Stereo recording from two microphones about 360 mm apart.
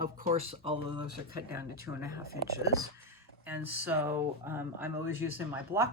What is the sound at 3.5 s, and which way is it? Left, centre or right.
Speech, centre.